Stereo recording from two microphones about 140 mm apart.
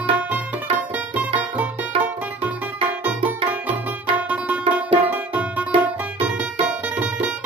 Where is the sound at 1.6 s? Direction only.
10° right (ahead or behind).